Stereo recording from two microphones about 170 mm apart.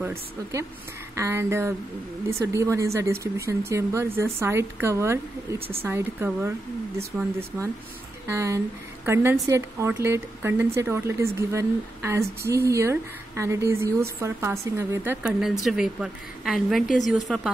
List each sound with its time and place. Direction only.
0.0 s a woman's voice: 15° right (ahead or behind); by 17.4 s centre (ahead or behind)